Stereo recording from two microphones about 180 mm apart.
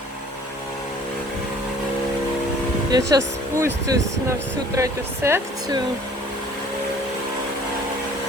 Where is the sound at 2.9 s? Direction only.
20° right (ahead or behind).